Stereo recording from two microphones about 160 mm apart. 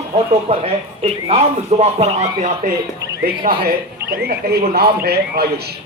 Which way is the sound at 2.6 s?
55° right (ahead or behind).